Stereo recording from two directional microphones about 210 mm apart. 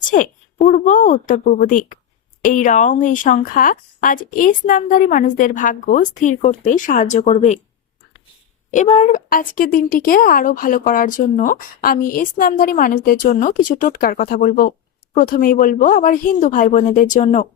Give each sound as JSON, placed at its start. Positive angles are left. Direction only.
{"t": 0.1, "sound": "a woman's voice", "side_deg": 35}
{"t": 8.7, "sound": "a woman's voice", "side_deg": 30}